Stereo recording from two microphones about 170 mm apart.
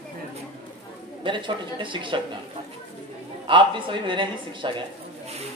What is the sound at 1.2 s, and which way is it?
Speech, 30° right (ahead or behind).